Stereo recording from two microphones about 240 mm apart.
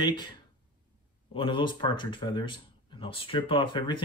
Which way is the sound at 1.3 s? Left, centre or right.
Left.